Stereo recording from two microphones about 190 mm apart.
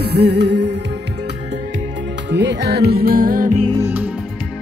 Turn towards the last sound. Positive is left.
turn(degrees=-10)  # may be behind; listen again after turning